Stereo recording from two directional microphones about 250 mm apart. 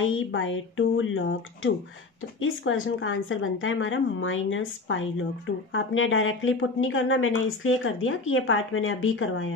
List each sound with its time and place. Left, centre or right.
0.0 s a woman's voice: left